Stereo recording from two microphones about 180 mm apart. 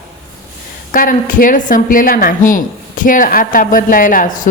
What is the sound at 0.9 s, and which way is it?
Speech, 50° left (ahead or behind).